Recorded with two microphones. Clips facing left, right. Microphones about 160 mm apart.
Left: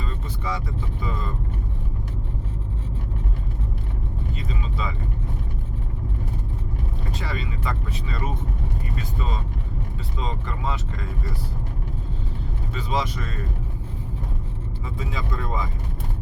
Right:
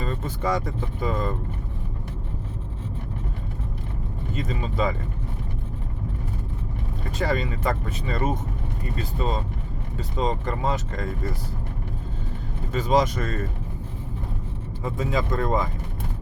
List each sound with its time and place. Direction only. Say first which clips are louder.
0.0 s speech: right 5 dB; 45° right (ahead or behind)
4.4 s speech: right 8 dB; 45° right (ahead or behind)
7.1 s speech: right 9 dB; 45° right (ahead or behind)
12.7 s speech: right 6 dB; 45° right (ahead or behind)
14.8 s speech: right 7 dB; 45° right (ahead or behind)